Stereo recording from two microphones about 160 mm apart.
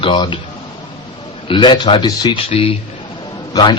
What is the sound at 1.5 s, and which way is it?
A man's voice, 30° left (ahead or behind).